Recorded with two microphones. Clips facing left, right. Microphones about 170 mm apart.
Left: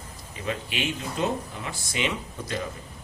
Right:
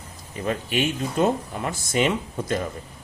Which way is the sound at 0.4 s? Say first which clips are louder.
Right 6 dB; 45° right (ahead or behind).